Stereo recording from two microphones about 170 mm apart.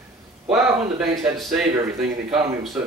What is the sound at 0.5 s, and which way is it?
Speech, centre (ahead or behind).